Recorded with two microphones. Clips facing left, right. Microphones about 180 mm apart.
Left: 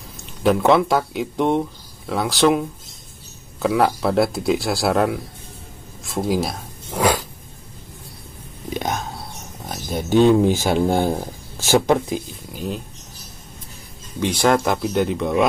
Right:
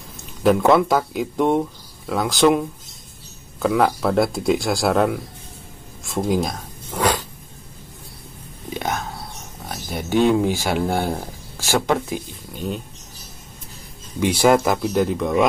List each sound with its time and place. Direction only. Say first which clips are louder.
0.4 s speech: right 1 dB; centre (ahead or behind)
3.6 s speech: even; centre (ahead or behind)
6.0 s a sound: even; centre (ahead or behind)
8.7 s whispering: left 1 dB; 20° left (ahead or behind)
10.0 s speech: left 3 dB; 15° right (ahead or behind)
10.5 s speech: left 3 dB; 20° left (ahead or behind)
12.5 s speech: even; centre (ahead or behind)
14.2 s speech: right 2 dB; 10° right (ahead or behind)